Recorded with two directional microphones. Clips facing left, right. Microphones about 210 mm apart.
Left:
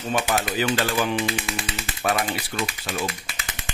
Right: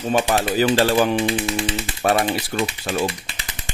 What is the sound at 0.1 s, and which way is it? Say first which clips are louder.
Speech: right 5 dB; 30° right (ahead or behind).